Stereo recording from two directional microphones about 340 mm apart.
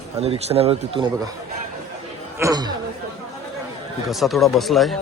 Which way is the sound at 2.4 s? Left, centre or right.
Centre.